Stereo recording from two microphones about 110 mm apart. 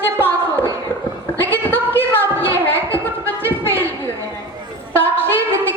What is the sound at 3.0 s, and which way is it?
Music, 20° left (ahead or behind).